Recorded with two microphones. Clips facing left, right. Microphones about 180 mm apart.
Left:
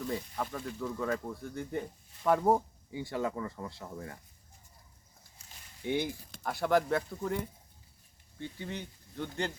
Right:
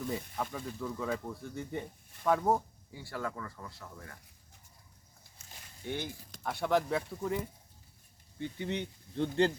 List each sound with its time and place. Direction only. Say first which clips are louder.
0.1 s speech: left 1 dB; centre (ahead or behind)
2.4 s speech: left 3 dB; 15° left (ahead or behind)
5.8 s speech: left 6 dB; 15° left (ahead or behind)
6.4 s speech: left 2 dB; centre (ahead or behind)
8.4 s speech: right 4 dB; 20° right (ahead or behind)